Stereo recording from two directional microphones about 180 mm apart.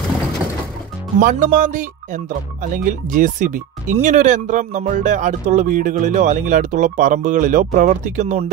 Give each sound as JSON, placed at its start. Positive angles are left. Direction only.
{"t": 1.2, "sound": "speech", "side_deg": -45}